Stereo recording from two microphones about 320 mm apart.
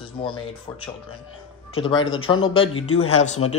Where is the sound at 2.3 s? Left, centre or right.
Centre.